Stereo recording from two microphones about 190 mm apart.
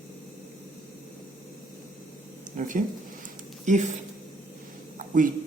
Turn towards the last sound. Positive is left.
turn(degrees=-45)  # may be behind; listen again after turning